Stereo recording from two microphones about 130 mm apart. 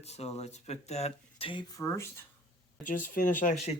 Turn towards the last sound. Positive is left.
turn(degrees=80)